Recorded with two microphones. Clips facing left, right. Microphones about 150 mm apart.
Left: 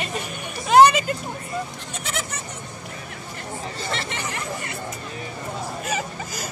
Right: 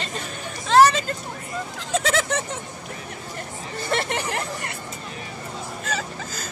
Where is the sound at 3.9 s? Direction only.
55° right (ahead or behind).